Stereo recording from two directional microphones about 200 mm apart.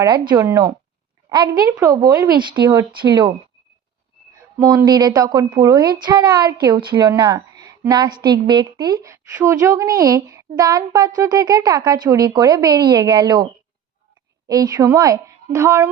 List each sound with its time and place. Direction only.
0.0 s a woman's voice: 20° right (ahead or behind)
4.4 s a woman's voice: 15° right (ahead or behind)